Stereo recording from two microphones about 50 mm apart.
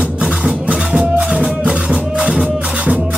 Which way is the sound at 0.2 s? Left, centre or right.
Centre.